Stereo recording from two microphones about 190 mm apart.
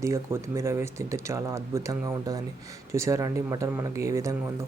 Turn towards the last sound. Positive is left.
turn(degrees=-15)  # may be behind; listen again after turning